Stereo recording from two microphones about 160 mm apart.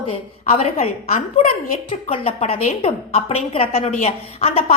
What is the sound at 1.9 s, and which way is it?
A woman's voice, 35° left (ahead or behind).